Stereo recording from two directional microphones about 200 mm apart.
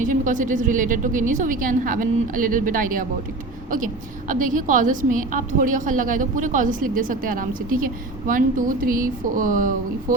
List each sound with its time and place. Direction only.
0.0 s a woman's voice: 40° right (ahead or behind)
4.3 s a woman's voice: 40° right (ahead or behind)